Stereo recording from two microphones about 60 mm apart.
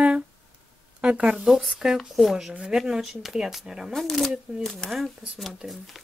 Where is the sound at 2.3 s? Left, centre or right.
Centre.